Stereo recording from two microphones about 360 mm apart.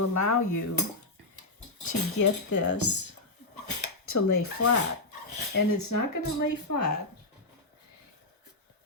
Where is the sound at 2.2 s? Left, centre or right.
Left.